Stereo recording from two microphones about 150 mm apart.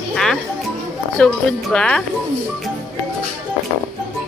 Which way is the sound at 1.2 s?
5° left (ahead or behind).